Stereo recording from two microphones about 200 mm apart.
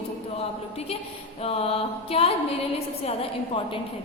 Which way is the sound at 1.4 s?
30° left (ahead or behind).